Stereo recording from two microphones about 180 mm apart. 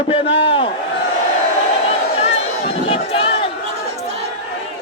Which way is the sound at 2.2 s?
35° left (ahead or behind).